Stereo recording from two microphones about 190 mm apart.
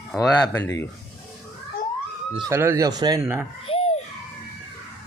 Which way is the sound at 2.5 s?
15° right (ahead or behind).